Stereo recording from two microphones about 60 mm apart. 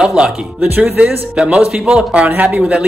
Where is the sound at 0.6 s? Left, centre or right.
Right.